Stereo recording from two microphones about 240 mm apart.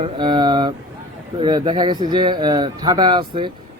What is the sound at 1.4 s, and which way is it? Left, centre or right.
Speech, centre.